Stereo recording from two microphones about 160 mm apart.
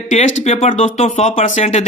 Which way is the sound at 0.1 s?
45° left (ahead or behind).